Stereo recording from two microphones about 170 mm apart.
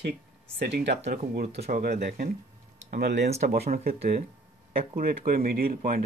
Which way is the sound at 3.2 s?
40° right (ahead or behind).